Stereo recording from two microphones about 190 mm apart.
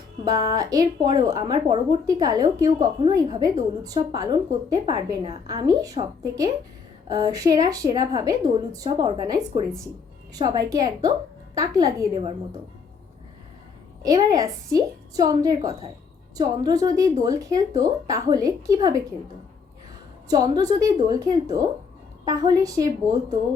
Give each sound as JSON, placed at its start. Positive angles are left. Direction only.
{"t": 0.3, "sound": "a woman's voice", "side_deg": -20}
{"t": 14.0, "sound": "a woman's voice", "side_deg": -20}
{"t": 20.2, "sound": "a woman's voice", "side_deg": -20}